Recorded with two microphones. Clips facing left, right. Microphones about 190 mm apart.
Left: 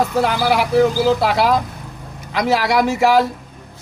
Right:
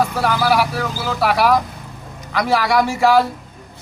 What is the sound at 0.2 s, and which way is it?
A man's voice, 20° left (ahead or behind).